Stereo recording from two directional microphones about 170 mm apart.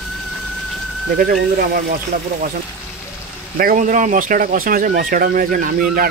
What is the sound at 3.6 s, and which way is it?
Speech, 55° right (ahead or behind).